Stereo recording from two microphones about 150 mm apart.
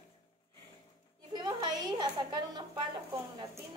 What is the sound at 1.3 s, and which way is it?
A woman's voice, 30° right (ahead or behind).